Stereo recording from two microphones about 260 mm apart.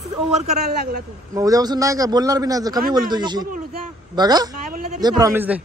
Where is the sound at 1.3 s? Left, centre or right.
Centre.